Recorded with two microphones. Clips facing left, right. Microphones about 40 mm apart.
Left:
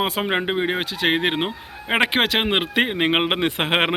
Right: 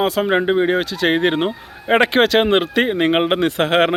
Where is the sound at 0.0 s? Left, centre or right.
Centre.